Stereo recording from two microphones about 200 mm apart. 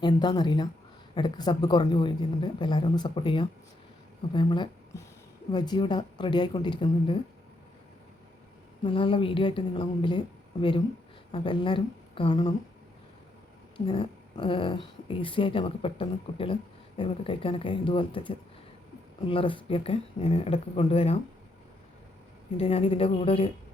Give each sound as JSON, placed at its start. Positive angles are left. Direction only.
{"t": 0.0, "sound": "speech", "side_deg": 20}
{"t": 8.8, "sound": "a woman's voice", "side_deg": 25}
{"t": 13.7, "sound": "speech", "side_deg": 25}
{"t": 22.5, "sound": "speech", "side_deg": 30}